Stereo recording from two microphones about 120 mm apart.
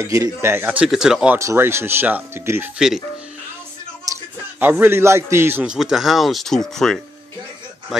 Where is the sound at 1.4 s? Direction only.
20° right (ahead or behind).